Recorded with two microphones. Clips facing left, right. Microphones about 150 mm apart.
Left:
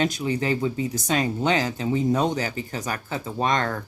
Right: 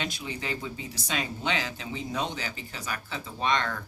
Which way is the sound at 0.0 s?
45° left (ahead or behind).